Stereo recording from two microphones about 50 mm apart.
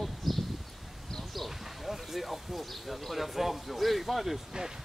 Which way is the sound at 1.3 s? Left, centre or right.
Centre.